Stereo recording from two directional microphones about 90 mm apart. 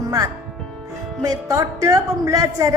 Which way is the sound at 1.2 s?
40° right (ahead or behind).